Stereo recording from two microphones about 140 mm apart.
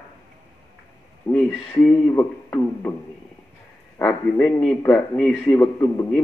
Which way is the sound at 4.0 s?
10° left (ahead or behind).